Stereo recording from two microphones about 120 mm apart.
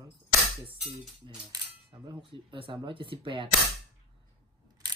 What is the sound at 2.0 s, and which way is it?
Speech, 45° right (ahead or behind).